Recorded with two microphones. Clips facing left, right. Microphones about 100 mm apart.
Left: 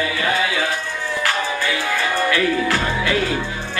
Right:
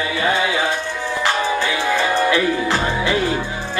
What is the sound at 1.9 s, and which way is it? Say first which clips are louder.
Music: right 4 dB; 20° right (ahead or behind).